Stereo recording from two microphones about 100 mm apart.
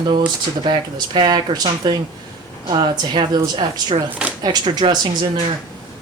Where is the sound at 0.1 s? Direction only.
55° right (ahead or behind).